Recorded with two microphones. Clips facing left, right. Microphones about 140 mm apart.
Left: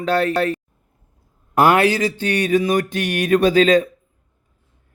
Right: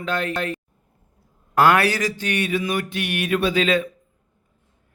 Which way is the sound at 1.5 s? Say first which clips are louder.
Left 3 dB; 20° left (ahead or behind).